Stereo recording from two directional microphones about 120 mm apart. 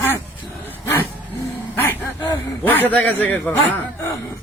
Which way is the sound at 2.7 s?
15° left (ahead or behind).